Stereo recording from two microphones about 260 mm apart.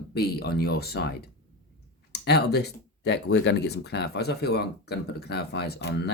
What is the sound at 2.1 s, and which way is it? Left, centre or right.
Speech, left.